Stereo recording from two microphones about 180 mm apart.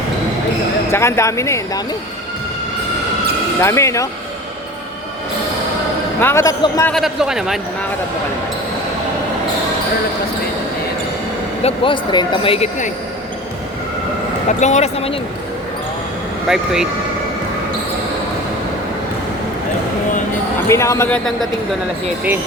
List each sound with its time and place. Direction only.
0.9 s speech: 15° left (ahead or behind)
3.6 s speech: 15° left (ahead or behind)
6.1 s speech: 15° left (ahead or behind)
6.9 s speech: centre (ahead or behind)
11.6 s speech: 30° left (ahead or behind)
14.6 s speech: 40° left (ahead or behind)
16.5 s speech: centre (ahead or behind)
20.7 s speech: 15° left (ahead or behind)